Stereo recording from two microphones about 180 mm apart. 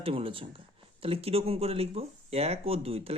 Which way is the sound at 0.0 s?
30° right (ahead or behind).